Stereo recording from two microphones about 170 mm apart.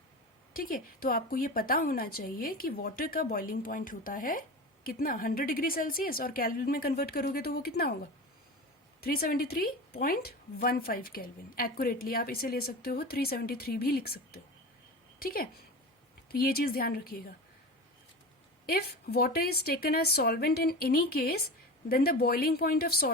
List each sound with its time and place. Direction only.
0.5 s a woman's voice: 55° left (ahead or behind)
9.0 s a woman's voice: 60° left (ahead or behind)
18.6 s a woman's voice: 65° left (ahead or behind)